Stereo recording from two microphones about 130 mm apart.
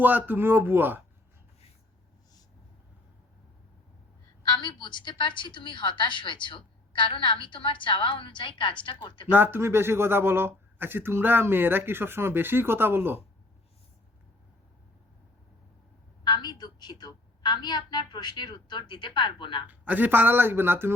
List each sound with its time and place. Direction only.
0.0 s speech: 15° right (ahead or behind)
4.4 s a woman's voice: 35° left (ahead or behind)
9.2 s speech: 15° right (ahead or behind)
16.2 s a woman's voice: 35° left (ahead or behind)
19.6 s speech: 10° right (ahead or behind)